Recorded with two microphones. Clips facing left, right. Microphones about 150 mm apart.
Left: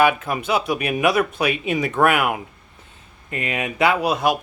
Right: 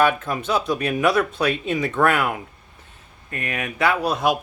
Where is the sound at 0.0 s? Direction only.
10° left (ahead or behind).